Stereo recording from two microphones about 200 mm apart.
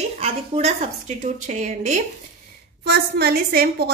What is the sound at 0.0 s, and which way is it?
A woman's voice, 35° right (ahead or behind).